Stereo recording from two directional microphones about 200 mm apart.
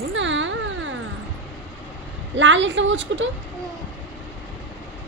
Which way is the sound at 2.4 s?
70° right (ahead or behind).